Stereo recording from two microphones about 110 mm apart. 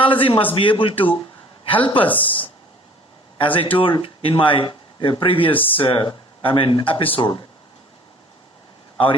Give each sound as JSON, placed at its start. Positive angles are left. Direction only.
{"t": 0.0, "sound": "a man's voice", "side_deg": 50}
{"t": 3.3, "sound": "speech", "side_deg": 50}